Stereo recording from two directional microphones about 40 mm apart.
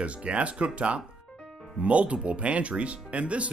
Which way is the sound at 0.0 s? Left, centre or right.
Right.